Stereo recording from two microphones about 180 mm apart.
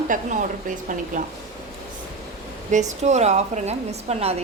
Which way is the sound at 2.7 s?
40° right (ahead or behind).